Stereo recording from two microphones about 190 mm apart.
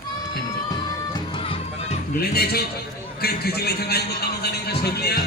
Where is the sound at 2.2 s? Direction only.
55° left (ahead or behind).